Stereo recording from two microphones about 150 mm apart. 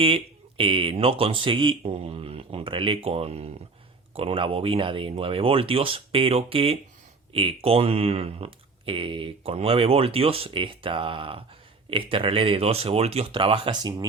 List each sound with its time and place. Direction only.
0.0 s speech: 35° right (ahead or behind)